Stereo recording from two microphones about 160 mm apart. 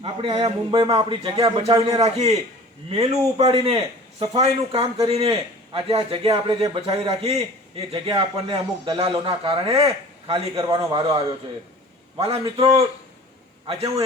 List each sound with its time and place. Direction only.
0.0 s a man's voice: 35° right (ahead or behind)
0.7 s a man's voice: 25° right (ahead or behind)
2.0 s a man's voice: 40° right (ahead or behind)
10.5 s a man's voice: 25° right (ahead or behind)